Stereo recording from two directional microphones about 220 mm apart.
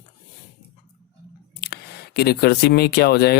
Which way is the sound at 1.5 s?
45° left (ahead or behind).